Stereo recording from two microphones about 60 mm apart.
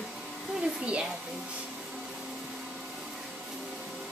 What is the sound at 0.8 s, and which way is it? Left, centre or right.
Speech, centre.